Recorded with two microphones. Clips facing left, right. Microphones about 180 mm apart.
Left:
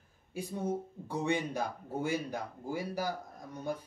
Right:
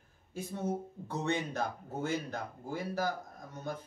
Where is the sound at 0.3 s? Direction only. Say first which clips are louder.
Left 1 dB; 10° left (ahead or behind).